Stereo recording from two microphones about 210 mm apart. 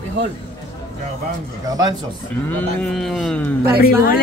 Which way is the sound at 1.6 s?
15° right (ahead or behind).